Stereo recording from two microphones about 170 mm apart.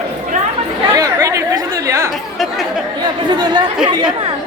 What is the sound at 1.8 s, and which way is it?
Speech, 15° right (ahead or behind).